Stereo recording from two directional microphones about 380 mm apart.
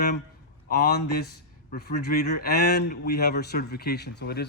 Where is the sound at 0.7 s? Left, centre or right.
Left.